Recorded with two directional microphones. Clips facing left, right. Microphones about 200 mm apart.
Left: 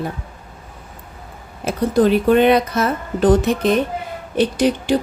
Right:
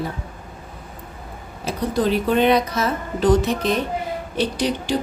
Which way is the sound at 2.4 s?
55° left (ahead or behind).